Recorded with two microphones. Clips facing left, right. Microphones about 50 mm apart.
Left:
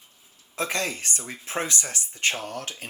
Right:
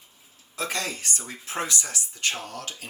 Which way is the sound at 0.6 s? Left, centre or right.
Left.